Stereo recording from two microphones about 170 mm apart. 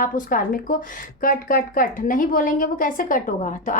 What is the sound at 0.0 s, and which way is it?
A woman's voice, 55° left (ahead or behind).